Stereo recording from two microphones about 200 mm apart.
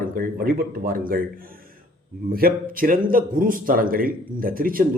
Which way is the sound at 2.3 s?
45° right (ahead or behind).